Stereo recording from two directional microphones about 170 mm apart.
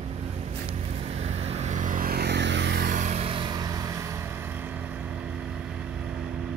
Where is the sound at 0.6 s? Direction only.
35° right (ahead or behind).